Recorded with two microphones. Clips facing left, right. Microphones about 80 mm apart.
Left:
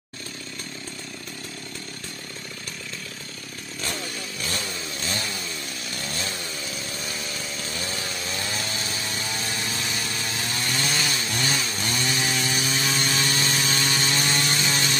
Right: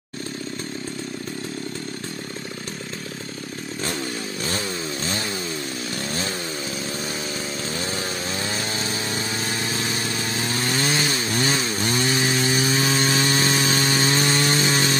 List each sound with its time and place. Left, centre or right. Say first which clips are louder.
4.5 s chainsaw: right 5 dB; right
7.7 s power tool: right 3 dB; right